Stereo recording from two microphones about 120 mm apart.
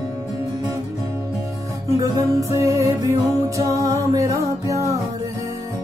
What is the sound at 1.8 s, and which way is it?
Music, 30° right (ahead or behind).